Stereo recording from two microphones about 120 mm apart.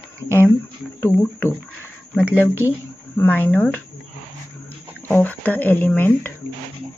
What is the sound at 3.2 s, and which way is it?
Speech, 15° left (ahead or behind).